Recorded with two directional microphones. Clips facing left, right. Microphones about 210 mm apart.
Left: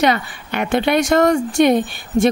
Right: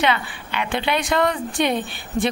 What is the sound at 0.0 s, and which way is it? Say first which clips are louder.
Speech: left 5 dB; 45° left (ahead or behind).